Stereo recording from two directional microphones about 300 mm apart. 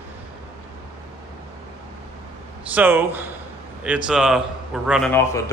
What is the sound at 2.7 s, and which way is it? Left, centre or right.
A man's voice, centre.